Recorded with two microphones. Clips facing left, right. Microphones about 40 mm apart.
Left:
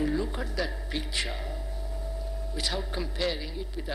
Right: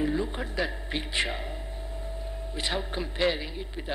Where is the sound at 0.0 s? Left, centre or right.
Right.